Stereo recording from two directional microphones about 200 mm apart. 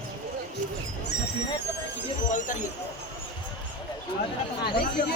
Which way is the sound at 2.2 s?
40° left (ahead or behind).